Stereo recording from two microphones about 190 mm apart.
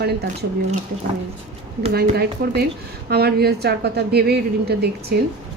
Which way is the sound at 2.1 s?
55° right (ahead or behind).